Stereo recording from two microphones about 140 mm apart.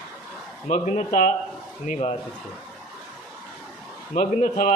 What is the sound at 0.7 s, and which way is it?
Speech, 60° left (ahead or behind).